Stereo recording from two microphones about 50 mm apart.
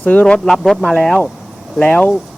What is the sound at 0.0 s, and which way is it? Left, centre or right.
Speech, left.